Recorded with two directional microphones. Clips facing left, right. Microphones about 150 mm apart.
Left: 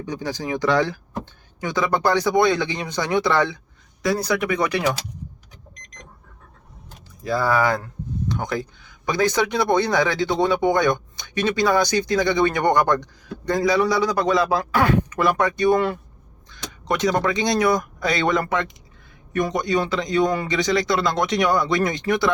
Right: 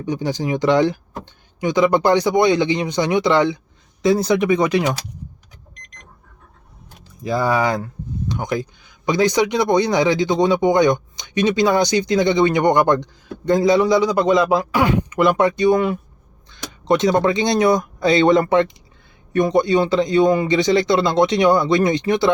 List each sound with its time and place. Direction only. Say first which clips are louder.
0.0 s speech: right 5 dB; 20° right (ahead or behind)
7.3 s speech: right 2 dB; 20° right (ahead or behind)